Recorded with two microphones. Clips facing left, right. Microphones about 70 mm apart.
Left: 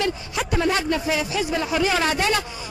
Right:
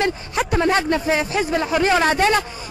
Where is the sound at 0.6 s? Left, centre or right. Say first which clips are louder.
Right 3 dB; right.